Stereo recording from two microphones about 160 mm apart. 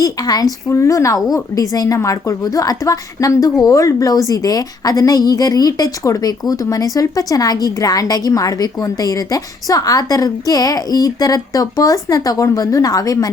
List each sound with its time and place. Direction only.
0.0 s a woman's voice: 25° left (ahead or behind)